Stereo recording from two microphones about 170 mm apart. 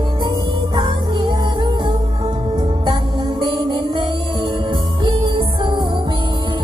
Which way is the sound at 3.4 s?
25° right (ahead or behind).